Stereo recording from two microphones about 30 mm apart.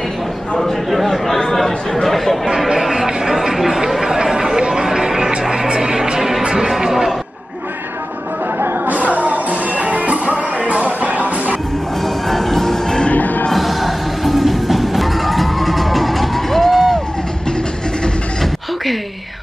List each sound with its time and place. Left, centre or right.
0.6 s speech: centre
2.4 s speech: centre
2.8 s music: centre
3.3 s a sound: centre
4.0 s chatter: centre
4.8 s music: centre
8.8 s music: right
12.3 s music: centre
13.1 s music: left
13.5 s music: centre